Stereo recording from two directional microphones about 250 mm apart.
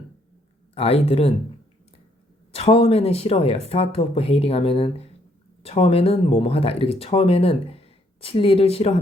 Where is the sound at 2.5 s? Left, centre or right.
Left.